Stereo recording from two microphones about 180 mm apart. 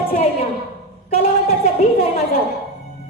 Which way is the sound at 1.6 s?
35° left (ahead or behind).